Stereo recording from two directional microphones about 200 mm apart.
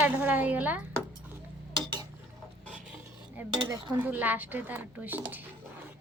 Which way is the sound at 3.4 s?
15° right (ahead or behind).